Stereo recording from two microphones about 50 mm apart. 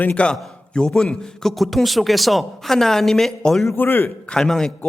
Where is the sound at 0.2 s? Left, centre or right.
Left.